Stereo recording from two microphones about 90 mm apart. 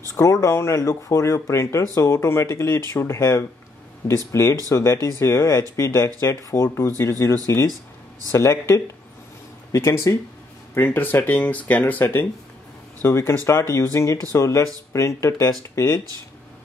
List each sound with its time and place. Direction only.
0.1 s speech: 40° left (ahead or behind)